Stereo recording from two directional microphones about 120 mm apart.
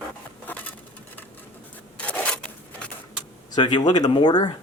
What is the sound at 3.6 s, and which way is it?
Speech, 40° left (ahead or behind).